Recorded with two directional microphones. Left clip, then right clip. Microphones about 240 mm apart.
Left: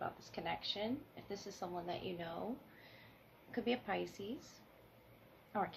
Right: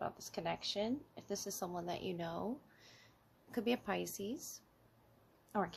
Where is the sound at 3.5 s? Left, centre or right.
Right.